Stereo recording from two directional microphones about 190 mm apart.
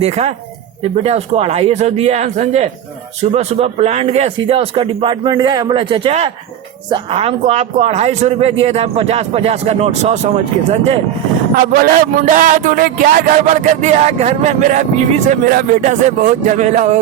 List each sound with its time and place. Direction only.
0.0 s a man's voice: 35° right (ahead or behind)
12.3 s music: 45° right (ahead or behind)